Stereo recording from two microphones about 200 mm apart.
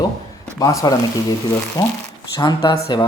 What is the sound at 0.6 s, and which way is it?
Speech, 15° left (ahead or behind).